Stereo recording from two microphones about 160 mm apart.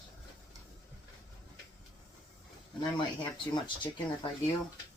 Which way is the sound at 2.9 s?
30° left (ahead or behind).